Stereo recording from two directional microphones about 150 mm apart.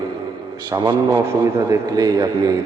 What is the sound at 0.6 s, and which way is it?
A man's voice, 25° right (ahead or behind).